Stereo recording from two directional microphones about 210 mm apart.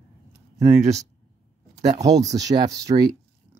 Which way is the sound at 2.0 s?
15° right (ahead or behind).